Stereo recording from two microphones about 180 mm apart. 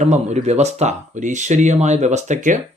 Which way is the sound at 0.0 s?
40° right (ahead or behind).